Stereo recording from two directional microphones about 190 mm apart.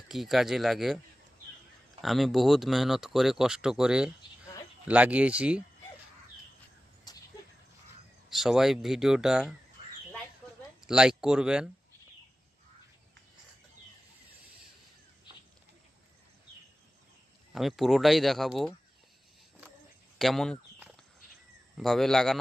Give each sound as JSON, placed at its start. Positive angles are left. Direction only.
{"t": 0.1, "sound": "speech", "side_deg": 0}
{"t": 2.0, "sound": "speech", "side_deg": 0}
{"t": 7.1, "sound": "a sound", "side_deg": 20}
{"t": 8.3, "sound": "speech", "side_deg": 0}
{"t": 10.8, "sound": "speech", "side_deg": -5}
{"t": 17.5, "sound": "speech", "side_deg": 0}
{"t": 20.1, "sound": "speech", "side_deg": 0}
{"t": 21.8, "sound": "speech", "side_deg": 0}